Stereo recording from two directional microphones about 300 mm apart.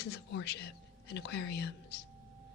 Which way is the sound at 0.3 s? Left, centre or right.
Left.